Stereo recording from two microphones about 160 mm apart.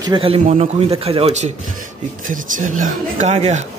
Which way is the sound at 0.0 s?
30° right (ahead or behind).